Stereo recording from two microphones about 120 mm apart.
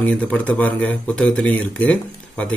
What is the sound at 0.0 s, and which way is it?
Speech, 10° left (ahead or behind).